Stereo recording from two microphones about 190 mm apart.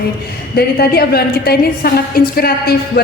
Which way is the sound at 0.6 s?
55° left (ahead or behind).